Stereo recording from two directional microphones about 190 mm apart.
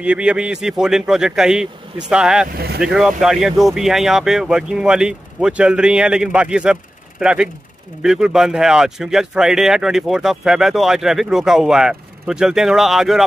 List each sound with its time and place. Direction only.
0.0 s speech: 5° right (ahead or behind)
2.5 s speech: 55° right (ahead or behind)
2.8 s speech: centre (ahead or behind)